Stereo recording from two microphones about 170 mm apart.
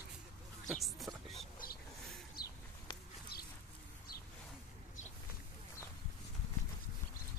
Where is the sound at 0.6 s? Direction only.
Centre (ahead or behind).